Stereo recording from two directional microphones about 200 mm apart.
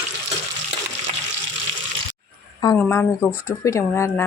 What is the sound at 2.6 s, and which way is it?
Speech, 10° left (ahead or behind).